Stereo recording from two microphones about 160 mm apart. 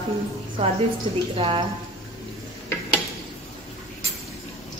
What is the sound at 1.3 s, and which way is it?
Speech, 35° right (ahead or behind).